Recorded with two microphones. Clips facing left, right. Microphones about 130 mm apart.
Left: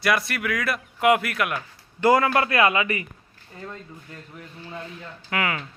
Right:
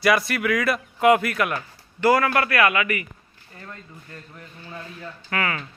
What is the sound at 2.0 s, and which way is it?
A man's voice, 20° left (ahead or behind).